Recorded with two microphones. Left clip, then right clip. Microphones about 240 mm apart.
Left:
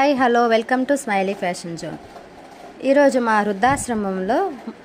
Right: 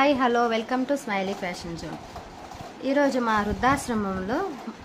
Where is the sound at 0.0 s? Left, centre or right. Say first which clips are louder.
Left 5 dB; left.